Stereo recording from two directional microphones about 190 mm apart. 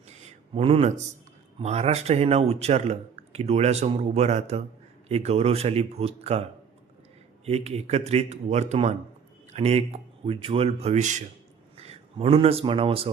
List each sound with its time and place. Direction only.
0.1 s a sound: 35° right (ahead or behind)
1.5 s a man's voice: 35° right (ahead or behind)
7.4 s a man's voice: 35° right (ahead or behind)